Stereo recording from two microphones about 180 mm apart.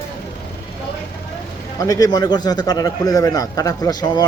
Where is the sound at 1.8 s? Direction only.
20° left (ahead or behind).